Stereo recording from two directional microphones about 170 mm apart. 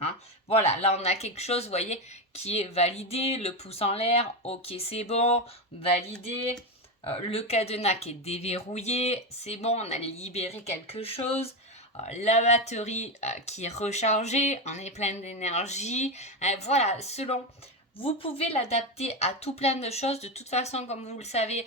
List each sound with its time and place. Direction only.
0.0 s speech: 35° left (ahead or behind)
7.0 s speech: 35° left (ahead or behind)